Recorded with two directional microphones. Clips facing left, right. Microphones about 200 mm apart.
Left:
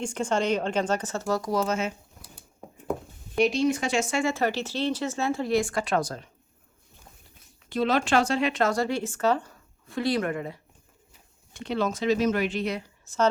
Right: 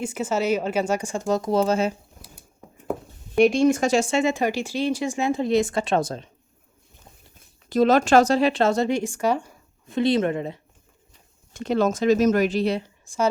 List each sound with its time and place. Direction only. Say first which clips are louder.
0.0 s speech: right 2 dB; 5° right (ahead or behind); by 1.9 s 35° right (ahead or behind)
3.3 s speech: right 6 dB; 50° right (ahead or behind)
4.1 s speech: right 4 dB; 20° right (ahead or behind)
7.7 s speech: right 7 dB; 45° right (ahead or behind); by 10.6 s 25° right (ahead or behind)
11.5 s speech: right 6 dB; 45° right (ahead or behind)